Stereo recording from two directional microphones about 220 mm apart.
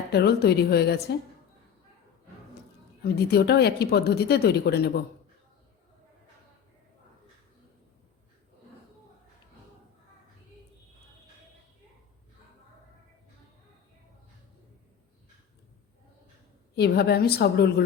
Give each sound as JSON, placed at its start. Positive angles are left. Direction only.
{"t": 0.1, "sound": "a woman's voice", "side_deg": 45}
{"t": 3.0, "sound": "a woman's voice", "side_deg": 45}
{"t": 16.7, "sound": "a woman's voice", "side_deg": 50}